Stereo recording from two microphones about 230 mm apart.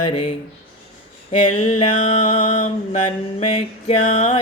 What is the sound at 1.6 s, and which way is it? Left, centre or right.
Music, left.